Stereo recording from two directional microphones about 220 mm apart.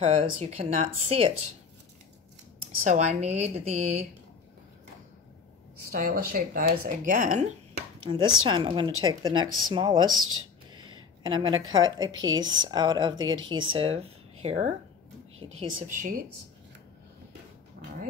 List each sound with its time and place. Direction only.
0.0 s speech: 30° right (ahead or behind)
2.8 s speech: 30° right (ahead or behind)
5.9 s speech: 40° right (ahead or behind)
8.0 s speech: 20° right (ahead or behind)
10.2 s a sound: 70° right (ahead or behind)
11.0 s a woman's voice: 20° right (ahead or behind); by 16.3 s 35° right (ahead or behind)
17.8 s dog: 45° right (ahead or behind)